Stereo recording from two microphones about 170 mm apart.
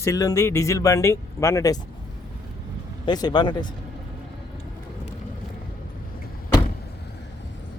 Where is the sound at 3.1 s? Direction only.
25° left (ahead or behind).